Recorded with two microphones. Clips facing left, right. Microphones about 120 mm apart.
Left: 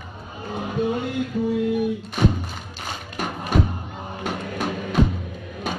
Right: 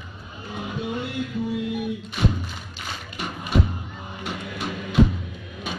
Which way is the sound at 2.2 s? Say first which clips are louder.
Left 4 dB; 45° left (ahead or behind).